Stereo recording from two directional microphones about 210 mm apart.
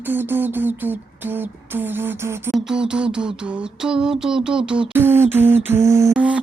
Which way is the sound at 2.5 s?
Centre (ahead or behind).